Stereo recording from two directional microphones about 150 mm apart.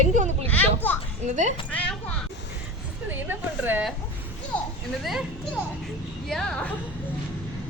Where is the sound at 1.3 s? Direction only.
55° right (ahead or behind).